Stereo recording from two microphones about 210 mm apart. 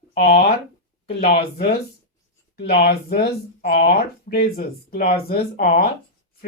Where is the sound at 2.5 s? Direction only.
50° left (ahead or behind).